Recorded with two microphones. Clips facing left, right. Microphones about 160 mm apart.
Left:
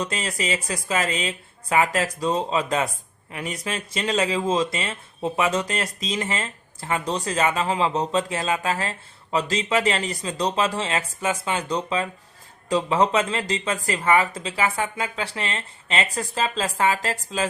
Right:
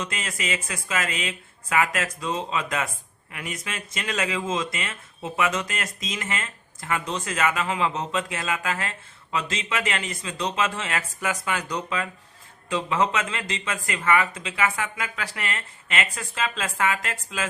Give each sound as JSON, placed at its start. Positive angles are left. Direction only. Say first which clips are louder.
{"t": 0.0, "sound": "speech", "louder": "left 4 dB", "side_deg": 35}